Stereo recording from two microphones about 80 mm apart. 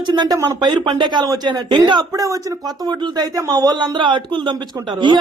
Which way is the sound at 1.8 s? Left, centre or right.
Right.